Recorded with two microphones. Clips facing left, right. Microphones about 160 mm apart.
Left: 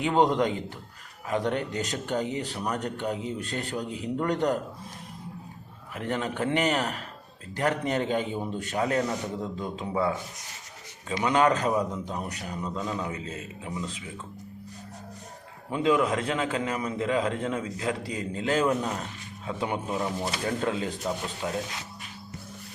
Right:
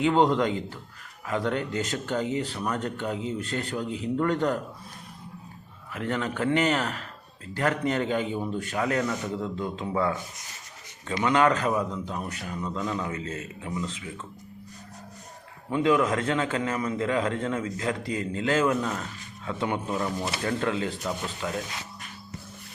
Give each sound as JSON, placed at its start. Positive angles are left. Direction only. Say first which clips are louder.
{"t": 0.0, "sound": "a man's voice", "louder": "right 1 dB", "side_deg": 10}
{"t": 5.9, "sound": "a man's voice", "louder": "right 1 dB", "side_deg": 20}
{"t": 11.2, "sound": "a man's voice", "louder": "right 1 dB", "side_deg": 20}
{"t": 15.7, "sound": "a man's voice", "louder": "right 1 dB", "side_deg": 20}